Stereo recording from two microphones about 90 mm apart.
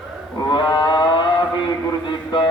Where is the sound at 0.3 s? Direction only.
50° left (ahead or behind).